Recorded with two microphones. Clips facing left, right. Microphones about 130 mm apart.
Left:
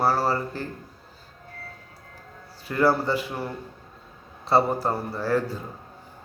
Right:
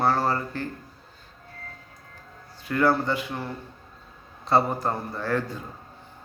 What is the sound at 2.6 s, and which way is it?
A man's voice, 5° left (ahead or behind).